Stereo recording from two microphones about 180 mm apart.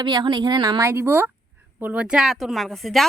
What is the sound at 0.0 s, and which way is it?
A woman's voice, 25° right (ahead or behind).